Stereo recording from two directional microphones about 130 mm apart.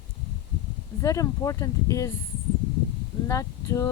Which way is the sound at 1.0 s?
25° left (ahead or behind).